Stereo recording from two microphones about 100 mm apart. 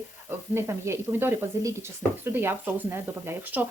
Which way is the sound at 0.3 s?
25° right (ahead or behind).